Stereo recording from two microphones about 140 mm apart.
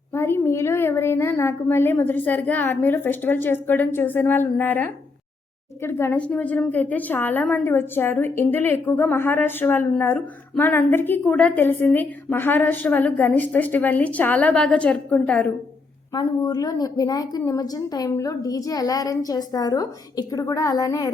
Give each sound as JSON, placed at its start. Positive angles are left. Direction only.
{"t": 0.1, "sound": "a woman's voice", "side_deg": 15}
{"t": 16.1, "sound": "a woman's voice", "side_deg": 25}